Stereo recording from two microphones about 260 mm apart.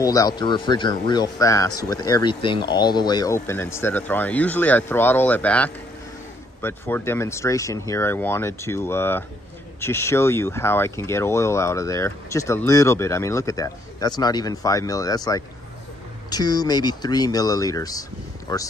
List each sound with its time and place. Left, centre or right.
0.0 s speech: centre